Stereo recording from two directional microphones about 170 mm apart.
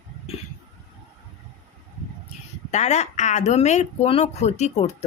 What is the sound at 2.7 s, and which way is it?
Speech, 40° left (ahead or behind).